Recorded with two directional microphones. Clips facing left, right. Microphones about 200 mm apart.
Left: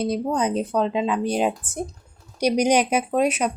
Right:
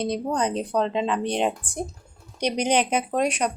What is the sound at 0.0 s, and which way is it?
A woman's voice, 5° left (ahead or behind).